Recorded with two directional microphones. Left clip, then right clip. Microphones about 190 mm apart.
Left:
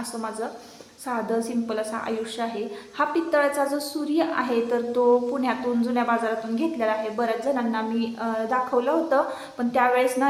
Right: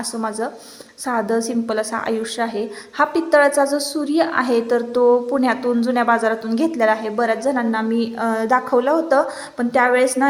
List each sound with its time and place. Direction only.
1.0 s a woman's voice: 35° right (ahead or behind)